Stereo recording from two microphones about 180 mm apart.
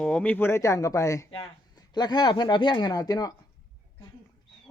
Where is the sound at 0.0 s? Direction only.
5° left (ahead or behind).